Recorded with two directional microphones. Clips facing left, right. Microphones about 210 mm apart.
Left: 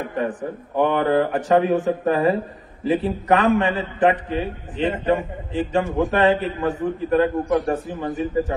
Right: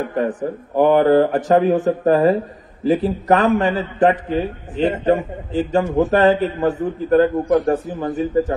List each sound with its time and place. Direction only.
0.2 s a man's voice: 35° right (ahead or behind)